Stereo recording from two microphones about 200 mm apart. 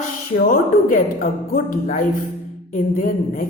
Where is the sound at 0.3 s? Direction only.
45° left (ahead or behind).